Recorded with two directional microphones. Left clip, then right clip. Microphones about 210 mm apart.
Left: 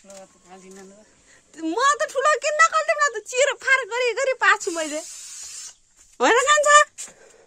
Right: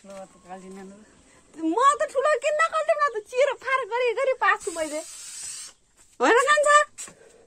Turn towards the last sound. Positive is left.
turn(degrees=20)  # may be behind; listen again after turning